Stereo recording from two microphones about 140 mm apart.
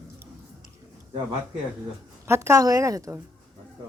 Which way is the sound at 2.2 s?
20° right (ahead or behind).